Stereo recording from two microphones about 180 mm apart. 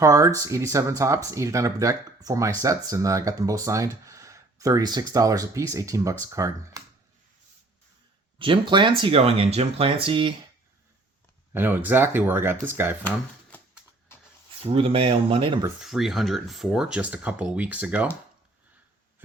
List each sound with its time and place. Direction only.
0.0 s speech: 15° right (ahead or behind)
8.4 s speech: 30° right (ahead or behind)
11.5 s speech: 10° right (ahead or behind)
14.7 s speech: 30° right (ahead or behind)
15.8 s speech: centre (ahead or behind)